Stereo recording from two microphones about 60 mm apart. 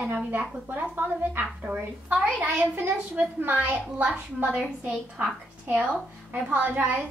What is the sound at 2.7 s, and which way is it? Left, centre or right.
A woman's voice, right.